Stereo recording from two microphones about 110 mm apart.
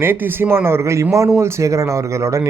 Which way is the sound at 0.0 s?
20° right (ahead or behind).